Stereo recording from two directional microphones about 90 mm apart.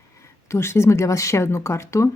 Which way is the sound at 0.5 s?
30° left (ahead or behind).